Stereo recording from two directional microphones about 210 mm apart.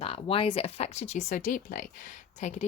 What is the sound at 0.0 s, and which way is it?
A woman's voice, 25° left (ahead or behind).